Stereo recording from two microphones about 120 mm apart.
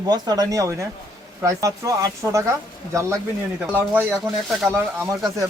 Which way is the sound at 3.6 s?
15° right (ahead or behind).